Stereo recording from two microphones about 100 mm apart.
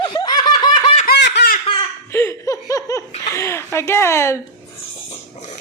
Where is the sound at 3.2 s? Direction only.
25° left (ahead or behind).